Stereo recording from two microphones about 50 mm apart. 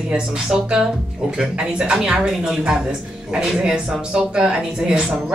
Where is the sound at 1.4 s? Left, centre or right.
Centre.